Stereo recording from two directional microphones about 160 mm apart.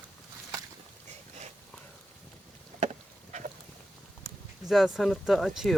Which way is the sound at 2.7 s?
45° right (ahead or behind).